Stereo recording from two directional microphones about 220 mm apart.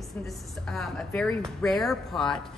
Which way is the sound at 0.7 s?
5° left (ahead or behind).